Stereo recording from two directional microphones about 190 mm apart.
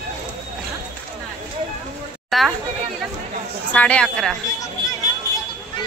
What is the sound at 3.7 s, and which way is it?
Speech, 5° left (ahead or behind).